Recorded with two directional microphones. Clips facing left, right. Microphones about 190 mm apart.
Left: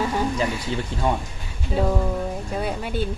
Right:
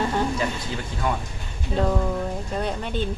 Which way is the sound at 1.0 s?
30° left (ahead or behind).